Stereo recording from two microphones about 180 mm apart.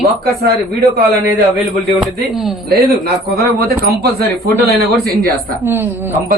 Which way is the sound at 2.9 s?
60° right (ahead or behind).